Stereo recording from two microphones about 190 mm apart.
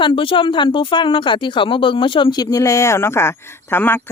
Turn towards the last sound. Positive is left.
turn(degrees=10)  # may be behind; listen again after turning